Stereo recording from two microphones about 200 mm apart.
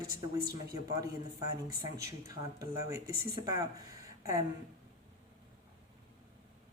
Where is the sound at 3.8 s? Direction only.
15° right (ahead or behind).